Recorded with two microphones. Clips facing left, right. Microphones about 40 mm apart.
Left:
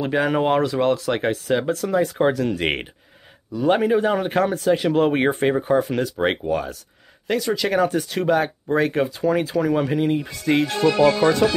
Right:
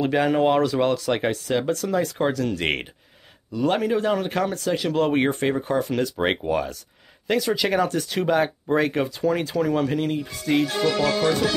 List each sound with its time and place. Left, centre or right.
0.0 s speech: centre
6.1 s speech: centre
10.5 s speech: left
10.8 s speech: centre